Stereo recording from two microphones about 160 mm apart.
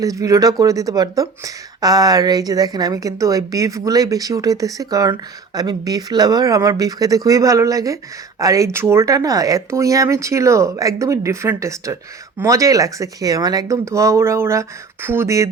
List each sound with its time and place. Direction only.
0.0 s speech: 20° right (ahead or behind)